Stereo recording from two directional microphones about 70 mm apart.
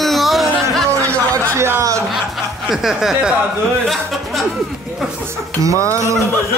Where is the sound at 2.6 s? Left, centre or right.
Centre.